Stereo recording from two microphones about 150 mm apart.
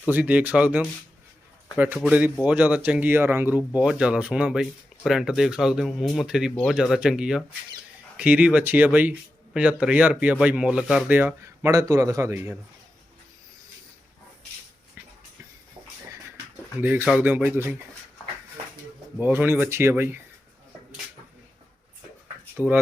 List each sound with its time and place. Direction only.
0.1 s a man's voice: 10° right (ahead or behind)
16.8 s speech: 10° right (ahead or behind)
19.2 s speech: 10° right (ahead or behind)
22.6 s speech: 15° left (ahead or behind)